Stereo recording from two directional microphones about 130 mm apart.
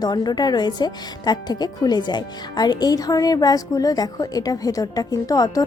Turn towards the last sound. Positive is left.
turn(degrees=25)  # may be behind; listen again after turning